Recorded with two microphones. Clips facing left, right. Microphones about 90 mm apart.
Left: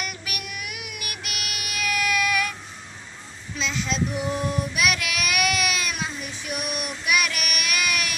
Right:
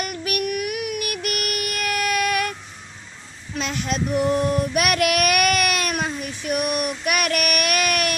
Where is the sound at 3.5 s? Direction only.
55° right (ahead or behind).